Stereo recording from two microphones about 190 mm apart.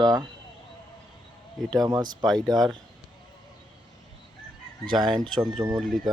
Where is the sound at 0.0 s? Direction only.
20° right (ahead or behind).